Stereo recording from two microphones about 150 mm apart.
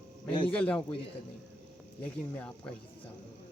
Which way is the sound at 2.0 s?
10° left (ahead or behind).